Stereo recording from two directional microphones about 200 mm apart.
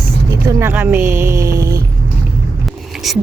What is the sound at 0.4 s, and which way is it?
Speech, 10° right (ahead or behind).